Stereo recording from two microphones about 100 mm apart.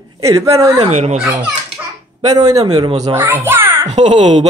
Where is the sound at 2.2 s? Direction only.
40° right (ahead or behind).